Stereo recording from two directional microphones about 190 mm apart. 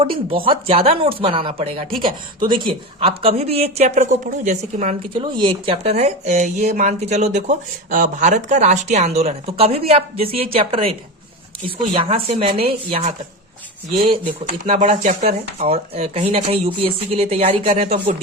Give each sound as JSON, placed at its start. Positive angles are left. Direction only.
{"t": 0.0, "sound": "speech", "side_deg": -30}
{"t": 5.1, "sound": "speech", "side_deg": -25}
{"t": 12.0, "sound": "speech", "side_deg": -30}
{"t": 14.0, "sound": "speech", "side_deg": -30}
{"t": 14.8, "sound": "speech", "side_deg": -40}